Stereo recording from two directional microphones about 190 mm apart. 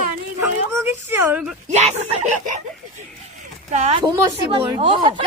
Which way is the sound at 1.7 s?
35° right (ahead or behind).